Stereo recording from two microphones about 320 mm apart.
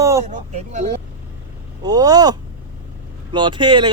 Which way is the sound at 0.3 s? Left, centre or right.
Right.